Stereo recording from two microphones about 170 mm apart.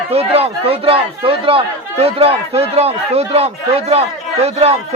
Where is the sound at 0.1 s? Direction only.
35° right (ahead or behind).